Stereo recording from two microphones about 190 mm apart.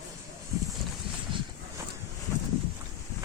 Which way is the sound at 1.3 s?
25° right (ahead or behind).